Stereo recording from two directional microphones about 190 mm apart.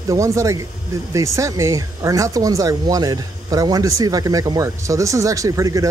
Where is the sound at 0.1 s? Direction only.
15° right (ahead or behind).